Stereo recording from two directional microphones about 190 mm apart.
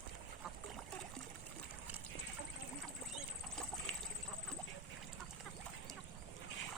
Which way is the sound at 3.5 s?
5° left (ahead or behind).